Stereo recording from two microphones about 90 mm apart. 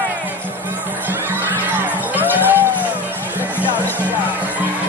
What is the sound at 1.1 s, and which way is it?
Music, 20° right (ahead or behind).